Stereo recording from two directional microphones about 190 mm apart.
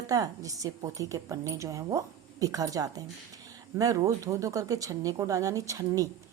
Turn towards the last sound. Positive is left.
turn(degrees=-15)  # may be behind; listen again after turning